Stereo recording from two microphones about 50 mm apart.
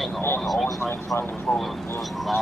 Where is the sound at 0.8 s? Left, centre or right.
Left.